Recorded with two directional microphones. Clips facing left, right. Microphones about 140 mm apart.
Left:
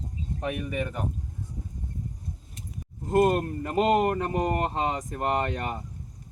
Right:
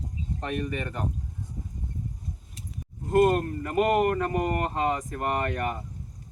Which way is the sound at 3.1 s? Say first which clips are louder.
Right 1 dB; 20° left (ahead or behind).